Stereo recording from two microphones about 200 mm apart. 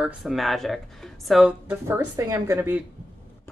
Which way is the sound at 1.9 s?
15° right (ahead or behind).